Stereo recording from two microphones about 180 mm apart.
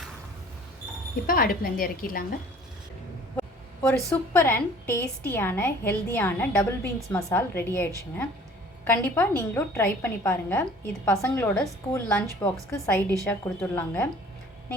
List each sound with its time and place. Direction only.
1.3 s a woman's voice: 55° left (ahead or behind)
3.8 s a woman's voice: 10° left (ahead or behind)
12.4 s a woman's voice: 15° left (ahead or behind)